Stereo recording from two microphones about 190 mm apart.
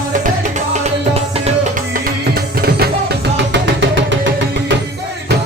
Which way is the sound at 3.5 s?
70° right (ahead or behind).